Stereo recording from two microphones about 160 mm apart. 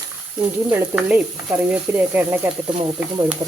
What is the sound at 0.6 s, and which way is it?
Speech, 10° right (ahead or behind).